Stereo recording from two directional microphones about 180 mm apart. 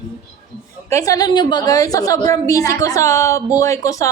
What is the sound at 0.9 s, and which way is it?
A woman's voice, 20° left (ahead or behind).